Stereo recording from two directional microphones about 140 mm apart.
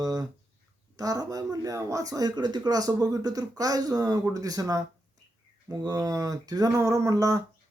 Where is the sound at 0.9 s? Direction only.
25° right (ahead or behind).